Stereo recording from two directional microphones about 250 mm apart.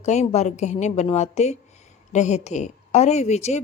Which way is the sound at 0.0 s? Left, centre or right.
Left.